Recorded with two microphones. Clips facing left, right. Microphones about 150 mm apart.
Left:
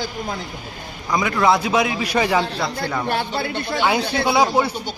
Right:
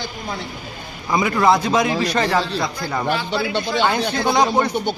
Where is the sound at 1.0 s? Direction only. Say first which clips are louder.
Right 1 dB; 5° right (ahead or behind).